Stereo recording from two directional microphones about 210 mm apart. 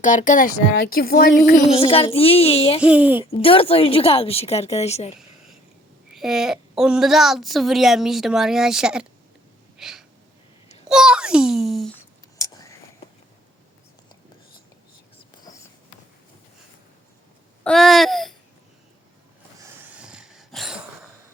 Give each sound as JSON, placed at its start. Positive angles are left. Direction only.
{"t": 0.0, "sound": "speech", "side_deg": 35}
{"t": 1.7, "sound": "a woman's voice", "side_deg": 25}
{"t": 2.8, "sound": "speech", "side_deg": -5}
{"t": 3.2, "sound": "a woman's voice", "side_deg": 25}
{"t": 6.1, "sound": "a woman's voice", "side_deg": 0}
{"t": 9.7, "sound": "wheeze", "side_deg": 0}
{"t": 10.8, "sound": "a child's voice", "side_deg": -5}
{"t": 12.4, "sound": "whispering", "side_deg": 15}
{"t": 17.6, "sound": "a sound", "side_deg": 0}
{"t": 19.6, "sound": "a sound", "side_deg": -10}